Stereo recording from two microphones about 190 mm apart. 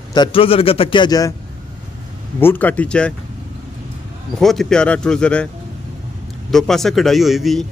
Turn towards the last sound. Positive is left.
turn(degrees=0)  # may be behind; listen again after turning